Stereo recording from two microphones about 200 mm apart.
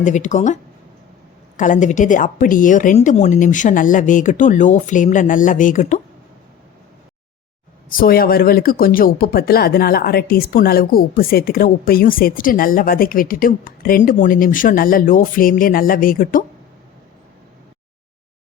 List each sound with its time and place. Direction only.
0.0 s a woman's voice: 40° left (ahead or behind)
7.9 s speech: 45° left (ahead or behind)